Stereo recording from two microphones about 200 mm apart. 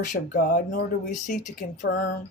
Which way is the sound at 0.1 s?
40° left (ahead or behind).